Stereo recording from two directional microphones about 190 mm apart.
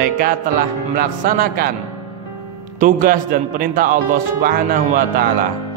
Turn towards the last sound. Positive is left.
turn(degrees=-50)  # may be behind; listen again after turning